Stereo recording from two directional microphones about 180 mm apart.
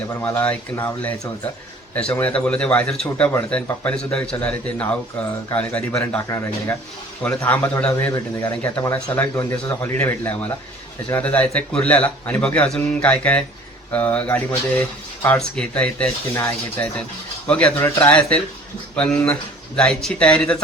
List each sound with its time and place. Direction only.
0.2 s speech: 10° left (ahead or behind)